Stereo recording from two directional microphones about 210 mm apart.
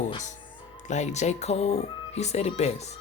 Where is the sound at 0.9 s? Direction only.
35° left (ahead or behind).